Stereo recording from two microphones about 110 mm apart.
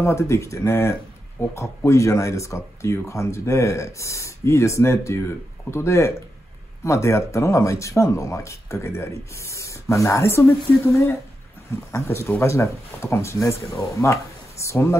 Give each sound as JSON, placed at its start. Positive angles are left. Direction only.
{"t": 0.0, "sound": "speech", "side_deg": 25}